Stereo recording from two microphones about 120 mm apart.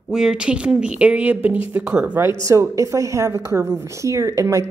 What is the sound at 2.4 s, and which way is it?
A woman's voice, 25° right (ahead or behind).